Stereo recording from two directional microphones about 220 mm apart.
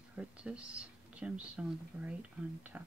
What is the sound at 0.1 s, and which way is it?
Speech, 5° right (ahead or behind).